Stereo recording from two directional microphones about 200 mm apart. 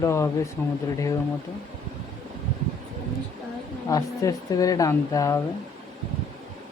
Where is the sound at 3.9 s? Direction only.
20° left (ahead or behind).